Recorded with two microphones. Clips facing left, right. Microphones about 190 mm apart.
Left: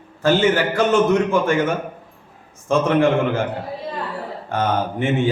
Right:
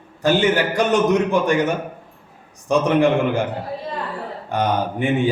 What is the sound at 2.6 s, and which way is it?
Speech, 15° right (ahead or behind).